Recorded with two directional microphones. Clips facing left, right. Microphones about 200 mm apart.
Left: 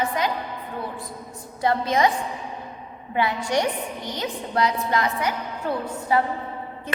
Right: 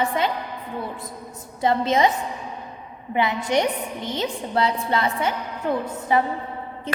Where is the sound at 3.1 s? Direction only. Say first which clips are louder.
Right 2 dB; 20° right (ahead or behind).